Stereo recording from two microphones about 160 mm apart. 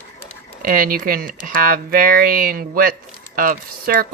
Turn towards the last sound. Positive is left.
turn(degrees=-65)  # may be behind; listen again after turning